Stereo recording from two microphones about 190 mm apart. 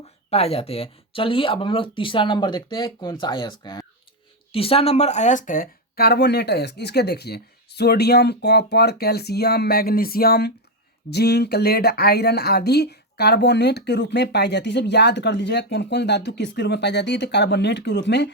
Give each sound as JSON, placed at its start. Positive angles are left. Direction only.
{"t": 0.3, "sound": "speech", "side_deg": 30}